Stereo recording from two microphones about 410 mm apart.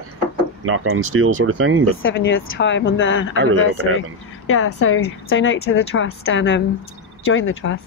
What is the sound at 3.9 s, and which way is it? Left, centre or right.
Speech, left.